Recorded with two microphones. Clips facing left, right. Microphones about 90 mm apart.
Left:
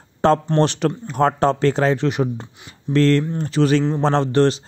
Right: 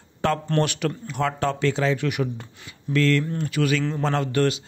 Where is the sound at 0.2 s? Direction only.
35° left (ahead or behind).